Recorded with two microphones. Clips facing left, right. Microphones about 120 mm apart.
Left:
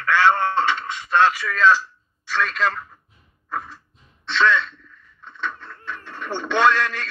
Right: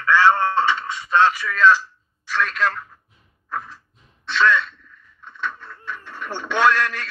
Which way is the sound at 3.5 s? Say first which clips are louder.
Even; centre (ahead or behind).